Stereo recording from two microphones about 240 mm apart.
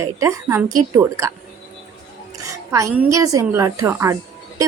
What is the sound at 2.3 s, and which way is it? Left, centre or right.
A woman's voice, centre.